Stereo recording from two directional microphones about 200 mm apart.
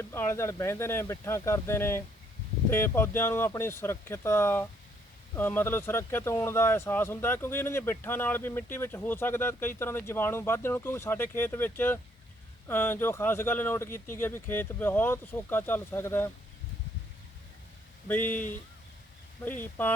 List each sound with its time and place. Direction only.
0.0 s speech: 10° left (ahead or behind)
18.1 s speech: 10° left (ahead or behind)
19.5 s speech: 10° left (ahead or behind)